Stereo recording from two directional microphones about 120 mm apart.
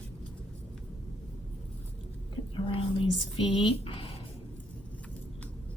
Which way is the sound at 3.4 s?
50° left (ahead or behind).